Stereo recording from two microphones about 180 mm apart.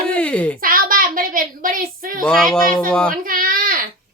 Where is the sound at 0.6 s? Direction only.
50° right (ahead or behind).